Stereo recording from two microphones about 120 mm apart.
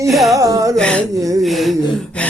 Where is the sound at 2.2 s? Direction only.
10° left (ahead or behind).